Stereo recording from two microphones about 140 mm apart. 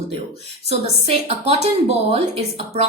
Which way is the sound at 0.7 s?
45° right (ahead or behind).